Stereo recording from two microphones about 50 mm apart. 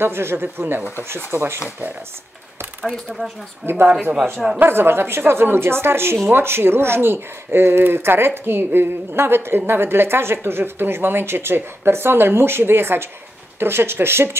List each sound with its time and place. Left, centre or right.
0.0 s a woman's voice: right
3.1 s speech: centre
3.6 s a woman's voice: right